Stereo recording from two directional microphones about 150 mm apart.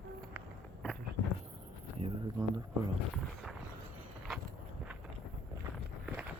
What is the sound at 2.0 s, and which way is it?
Speech, 45° right (ahead or behind).